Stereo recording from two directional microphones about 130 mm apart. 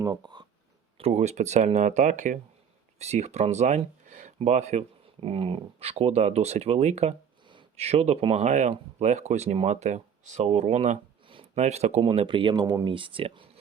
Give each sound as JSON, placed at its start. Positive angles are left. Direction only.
{"t": 0.0, "sound": "speech", "side_deg": -30}
{"t": 0.9, "sound": "speech", "side_deg": -55}
{"t": 4.4, "sound": "speech", "side_deg": -55}